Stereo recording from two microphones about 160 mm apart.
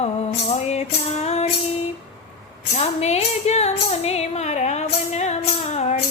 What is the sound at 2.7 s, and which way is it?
Music, 45° left (ahead or behind).